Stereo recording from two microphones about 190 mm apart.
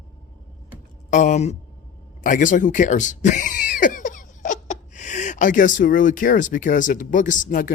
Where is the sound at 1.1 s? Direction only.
40° left (ahead or behind).